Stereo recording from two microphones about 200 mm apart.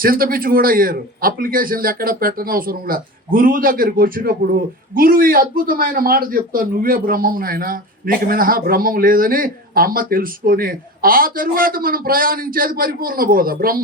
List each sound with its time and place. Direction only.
0.0 s a man's voice: 45° right (ahead or behind)